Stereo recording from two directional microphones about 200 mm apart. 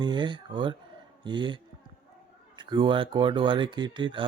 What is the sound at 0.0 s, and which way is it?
Speech, 20° right (ahead or behind).